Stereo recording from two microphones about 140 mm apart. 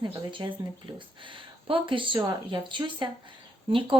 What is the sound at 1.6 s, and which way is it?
Speech, 40° right (ahead or behind).